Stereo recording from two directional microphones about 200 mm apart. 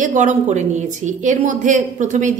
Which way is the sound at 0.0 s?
40° right (ahead or behind).